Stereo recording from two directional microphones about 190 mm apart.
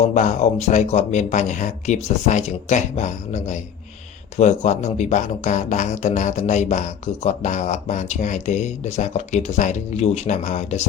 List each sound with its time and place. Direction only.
0.0 s speech: 40° left (ahead or behind)